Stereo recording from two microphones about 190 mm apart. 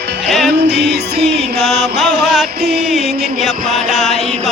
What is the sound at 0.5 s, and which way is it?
Music, 65° right (ahead or behind).